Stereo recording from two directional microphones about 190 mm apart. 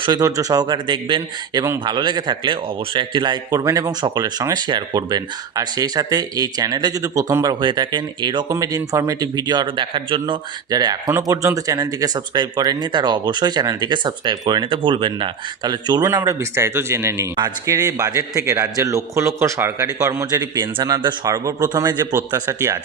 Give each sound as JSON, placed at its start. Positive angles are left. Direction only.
{"t": 0.0, "sound": "speech", "side_deg": -20}